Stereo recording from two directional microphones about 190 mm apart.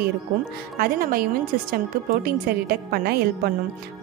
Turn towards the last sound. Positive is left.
turn(degrees=-55)  # may be behind; listen again after turning